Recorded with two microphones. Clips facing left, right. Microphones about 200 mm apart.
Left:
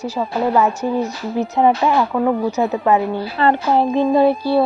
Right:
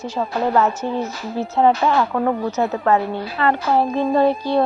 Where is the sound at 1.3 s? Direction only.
15° left (ahead or behind).